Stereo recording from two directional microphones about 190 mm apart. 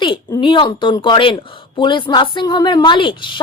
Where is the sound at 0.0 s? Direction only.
25° left (ahead or behind).